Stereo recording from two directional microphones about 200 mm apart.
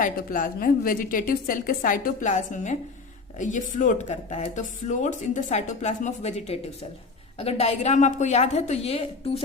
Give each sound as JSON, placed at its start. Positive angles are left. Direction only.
{"t": 0.0, "sound": "a woman's voice", "side_deg": 45}